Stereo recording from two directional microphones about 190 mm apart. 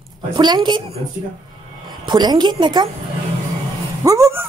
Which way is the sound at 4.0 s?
15° right (ahead or behind).